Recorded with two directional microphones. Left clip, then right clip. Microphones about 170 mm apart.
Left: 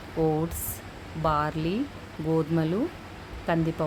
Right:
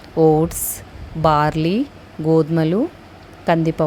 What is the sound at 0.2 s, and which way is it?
Speech, 40° right (ahead or behind).